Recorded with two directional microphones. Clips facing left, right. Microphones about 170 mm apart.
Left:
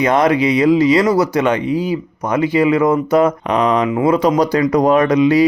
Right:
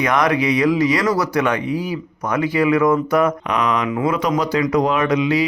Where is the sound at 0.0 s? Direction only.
25° left (ahead or behind).